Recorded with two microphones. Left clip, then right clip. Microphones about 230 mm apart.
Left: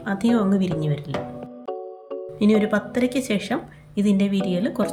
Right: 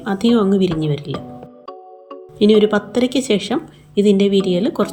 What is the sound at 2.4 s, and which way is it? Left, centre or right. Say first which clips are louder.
Speech: right 8 dB; centre.